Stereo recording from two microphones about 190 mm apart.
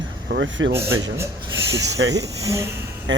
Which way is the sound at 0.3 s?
70° right (ahead or behind).